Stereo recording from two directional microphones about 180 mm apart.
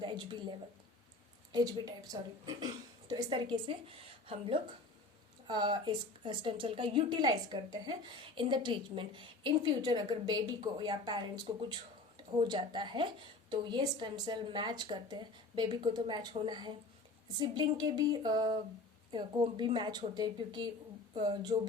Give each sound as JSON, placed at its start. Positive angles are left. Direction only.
{"t": 0.0, "sound": "speech", "side_deg": -25}
{"t": 1.5, "sound": "a woman's voice", "side_deg": -20}
{"t": 12.5, "sound": "a woman's voice", "side_deg": -25}